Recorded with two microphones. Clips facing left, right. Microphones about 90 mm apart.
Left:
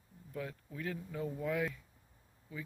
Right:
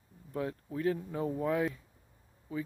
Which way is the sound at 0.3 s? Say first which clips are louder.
Right 7 dB; 40° right (ahead or behind).